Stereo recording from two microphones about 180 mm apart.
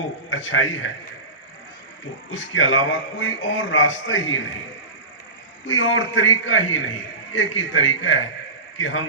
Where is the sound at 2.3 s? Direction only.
90° left.